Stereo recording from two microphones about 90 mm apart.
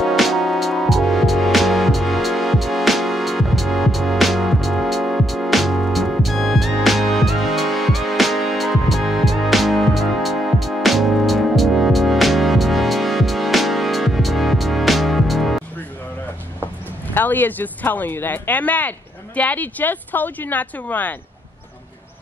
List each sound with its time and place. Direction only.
0.0 s music: centre (ahead or behind)
17.1 s speech: 20° left (ahead or behind)